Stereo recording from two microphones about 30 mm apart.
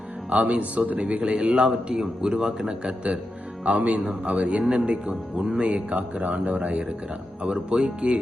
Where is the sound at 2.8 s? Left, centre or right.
Right.